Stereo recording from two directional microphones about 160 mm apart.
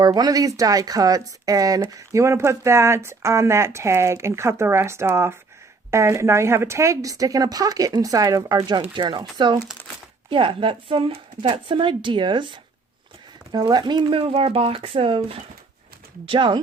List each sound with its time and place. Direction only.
0.0 s speech: 25° right (ahead or behind)